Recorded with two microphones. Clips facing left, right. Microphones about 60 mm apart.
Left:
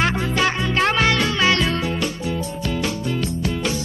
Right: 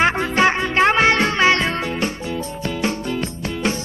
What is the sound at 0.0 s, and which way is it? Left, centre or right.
Music, right.